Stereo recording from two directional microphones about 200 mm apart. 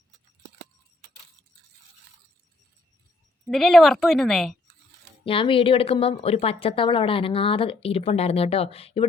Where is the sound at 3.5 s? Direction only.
Centre (ahead or behind).